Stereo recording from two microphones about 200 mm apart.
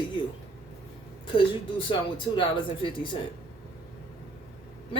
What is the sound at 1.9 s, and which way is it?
Speech, 25° left (ahead or behind).